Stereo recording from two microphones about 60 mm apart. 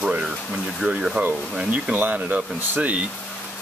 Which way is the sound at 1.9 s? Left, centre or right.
Right.